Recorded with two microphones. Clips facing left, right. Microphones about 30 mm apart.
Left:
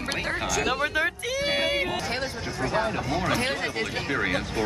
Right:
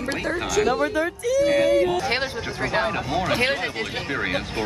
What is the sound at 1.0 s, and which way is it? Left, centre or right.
Speech, left.